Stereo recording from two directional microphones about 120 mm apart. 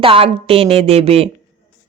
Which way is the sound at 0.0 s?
50° right (ahead or behind).